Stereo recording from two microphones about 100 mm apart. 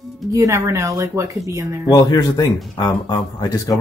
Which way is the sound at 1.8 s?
40° left (ahead or behind).